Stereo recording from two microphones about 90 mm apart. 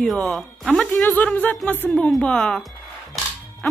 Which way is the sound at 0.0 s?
5° left (ahead or behind).